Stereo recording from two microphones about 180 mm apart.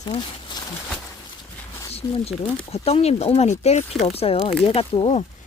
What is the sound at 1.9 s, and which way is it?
Speech, 35° left (ahead or behind).